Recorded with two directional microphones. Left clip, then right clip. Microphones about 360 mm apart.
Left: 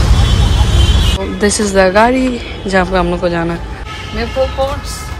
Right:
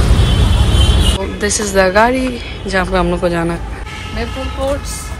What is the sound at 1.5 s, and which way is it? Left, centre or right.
A woman's voice, centre.